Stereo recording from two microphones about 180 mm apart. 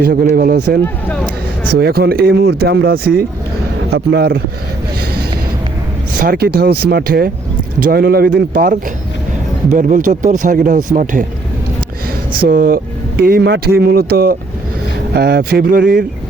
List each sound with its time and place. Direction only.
0.0 s speech: 55° right (ahead or behind)
1.8 s speech: 60° right (ahead or behind)
6.1 s speech: 55° right (ahead or behind)
12.4 s speech: 55° right (ahead or behind)